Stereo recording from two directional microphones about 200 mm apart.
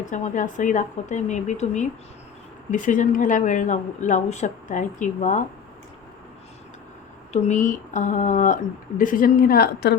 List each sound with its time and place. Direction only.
0.0 s a woman's voice: 40° left (ahead or behind)
7.3 s a woman's voice: 35° left (ahead or behind)